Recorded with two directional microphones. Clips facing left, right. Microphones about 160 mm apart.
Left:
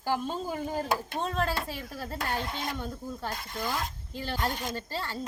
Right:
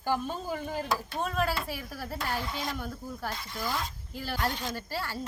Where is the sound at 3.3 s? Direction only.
45° left (ahead or behind).